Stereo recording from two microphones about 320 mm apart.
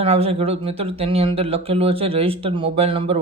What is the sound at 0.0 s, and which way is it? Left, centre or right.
A man's voice, centre.